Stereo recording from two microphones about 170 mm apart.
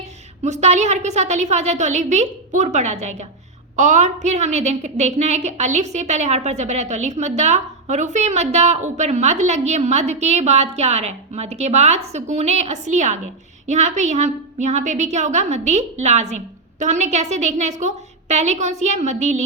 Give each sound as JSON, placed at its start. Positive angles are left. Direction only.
{"t": 0.4, "sound": "a woman's voice", "side_deg": -40}